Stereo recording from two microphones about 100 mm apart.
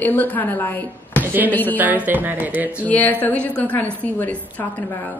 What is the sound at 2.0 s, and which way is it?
Speech, 15° right (ahead or behind).